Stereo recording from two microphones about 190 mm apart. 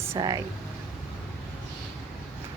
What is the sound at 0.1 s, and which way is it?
Speech, 20° right (ahead or behind).